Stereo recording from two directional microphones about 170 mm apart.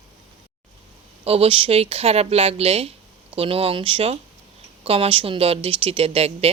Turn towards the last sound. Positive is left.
turn(degrees=-35)  # may be behind; listen again after turning